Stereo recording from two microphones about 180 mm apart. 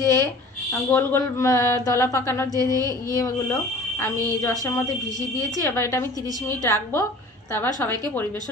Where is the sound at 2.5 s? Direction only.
20° right (ahead or behind).